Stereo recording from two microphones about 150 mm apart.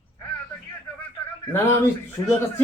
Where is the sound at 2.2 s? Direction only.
30° left (ahead or behind).